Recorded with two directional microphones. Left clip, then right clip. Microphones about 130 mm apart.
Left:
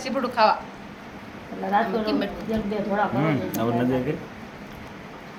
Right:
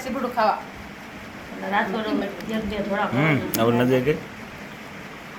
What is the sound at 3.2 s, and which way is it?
Speech, 30° right (ahead or behind).